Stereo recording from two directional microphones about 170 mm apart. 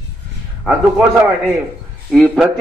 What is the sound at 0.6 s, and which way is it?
A man's voice, 5° right (ahead or behind).